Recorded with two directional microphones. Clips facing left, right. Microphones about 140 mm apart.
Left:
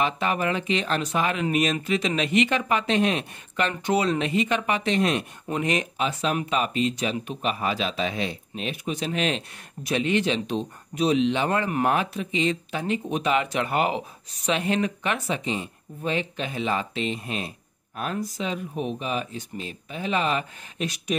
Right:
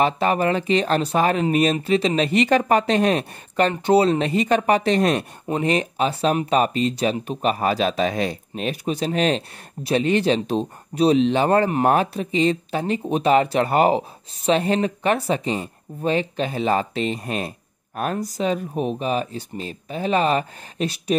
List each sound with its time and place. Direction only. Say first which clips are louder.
0.0 s speech: right 5 dB; 35° right (ahead or behind)